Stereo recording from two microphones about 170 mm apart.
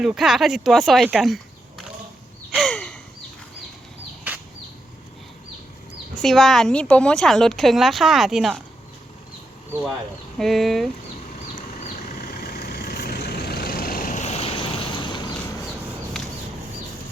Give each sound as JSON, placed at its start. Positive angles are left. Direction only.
{"t": 0.0, "sound": "a woman's voice", "side_deg": -5}
{"t": 2.5, "sound": "gasp", "side_deg": 5}
{"t": 6.2, "sound": "a woman's voice", "side_deg": 0}
{"t": 10.3, "sound": "a woman's voice", "side_deg": 0}
{"t": 11.3, "sound": "vehicle", "side_deg": 45}